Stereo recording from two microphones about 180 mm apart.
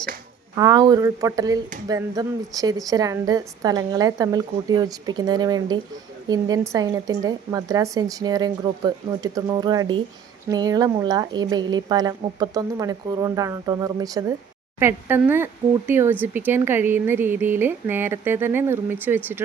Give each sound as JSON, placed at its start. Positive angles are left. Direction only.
{"t": 0.5, "sound": "a woman's voice", "side_deg": -20}